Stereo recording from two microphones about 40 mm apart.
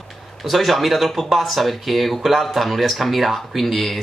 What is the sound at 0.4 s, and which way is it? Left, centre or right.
Speech, centre.